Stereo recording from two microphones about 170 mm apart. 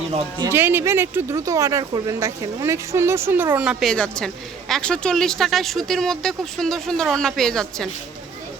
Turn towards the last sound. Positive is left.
turn(degrees=5)  # may be behind; listen again after turning